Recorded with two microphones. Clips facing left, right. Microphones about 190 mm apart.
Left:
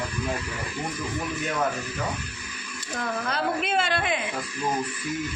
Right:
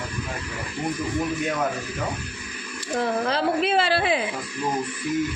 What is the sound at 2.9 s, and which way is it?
Speech, 30° right (ahead or behind).